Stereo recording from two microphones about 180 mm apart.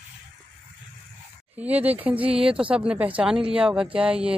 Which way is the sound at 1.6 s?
10° right (ahead or behind).